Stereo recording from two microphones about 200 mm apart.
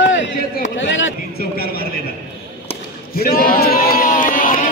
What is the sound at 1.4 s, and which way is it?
Speech, 50° left (ahead or behind).